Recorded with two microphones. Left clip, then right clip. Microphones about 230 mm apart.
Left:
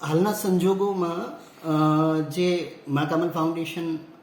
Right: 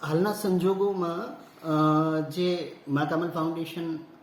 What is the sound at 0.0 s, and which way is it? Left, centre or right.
A man's voice, centre.